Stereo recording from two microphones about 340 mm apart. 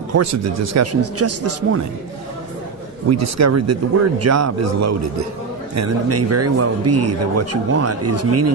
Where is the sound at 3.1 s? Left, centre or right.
Right.